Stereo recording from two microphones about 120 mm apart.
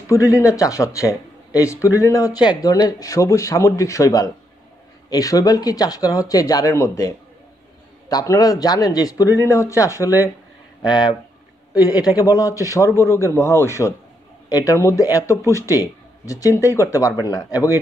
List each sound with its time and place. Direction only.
0.1 s speech: 25° left (ahead or behind)